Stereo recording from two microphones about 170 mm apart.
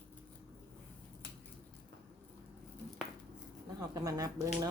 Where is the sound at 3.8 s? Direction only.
20° right (ahead or behind).